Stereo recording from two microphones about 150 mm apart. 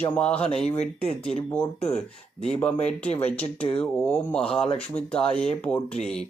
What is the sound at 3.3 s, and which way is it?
Speech, 10° left (ahead or behind).